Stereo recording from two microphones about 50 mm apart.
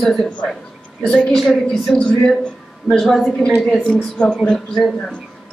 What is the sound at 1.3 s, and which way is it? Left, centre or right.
Speech, centre.